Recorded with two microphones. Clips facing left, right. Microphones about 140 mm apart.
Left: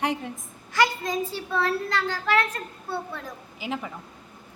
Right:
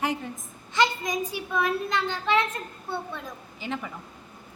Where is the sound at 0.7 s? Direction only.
20° right (ahead or behind).